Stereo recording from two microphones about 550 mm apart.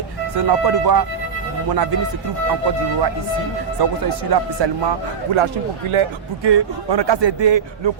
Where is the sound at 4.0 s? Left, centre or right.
Right.